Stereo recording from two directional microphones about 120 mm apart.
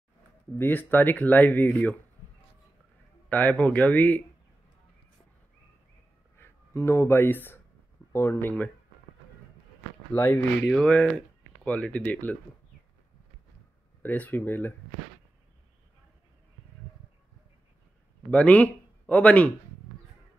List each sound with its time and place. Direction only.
0.6 s speech: 15° left (ahead or behind)
3.3 s speech: 15° left (ahead or behind)
6.3 s a sound: 20° left (ahead or behind)
8.1 s speech: 20° left (ahead or behind)
10.1 s speech: 15° left (ahead or behind)
14.0 s speech: 15° left (ahead or behind)
18.3 s speech: 10° left (ahead or behind)